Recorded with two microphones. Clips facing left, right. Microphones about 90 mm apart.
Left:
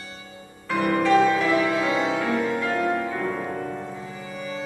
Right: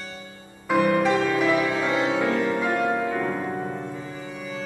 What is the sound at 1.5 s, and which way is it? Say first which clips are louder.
Music: left 1 dB; centre (ahead or behind).